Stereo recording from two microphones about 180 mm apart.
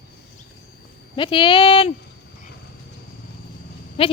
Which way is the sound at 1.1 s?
30° left (ahead or behind).